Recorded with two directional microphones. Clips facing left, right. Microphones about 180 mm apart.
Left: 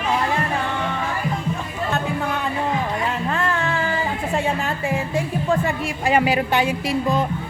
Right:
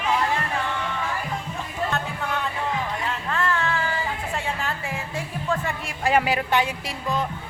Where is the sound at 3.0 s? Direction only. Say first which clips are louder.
Left 4 dB; 15° left (ahead or behind).